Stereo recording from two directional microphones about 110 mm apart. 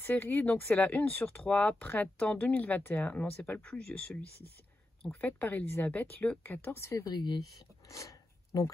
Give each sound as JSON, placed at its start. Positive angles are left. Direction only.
{"t": 0.0, "sound": "speech", "side_deg": 15}
{"t": 7.1, "sound": "speech", "side_deg": 40}